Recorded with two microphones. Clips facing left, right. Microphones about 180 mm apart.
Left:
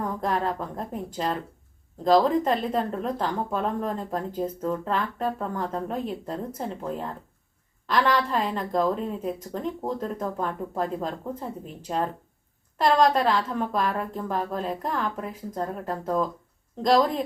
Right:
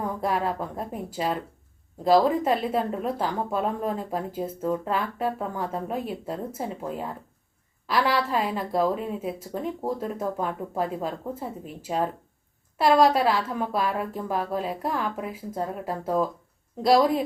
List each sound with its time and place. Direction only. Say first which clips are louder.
0.0 s speech: even; 5° right (ahead or behind)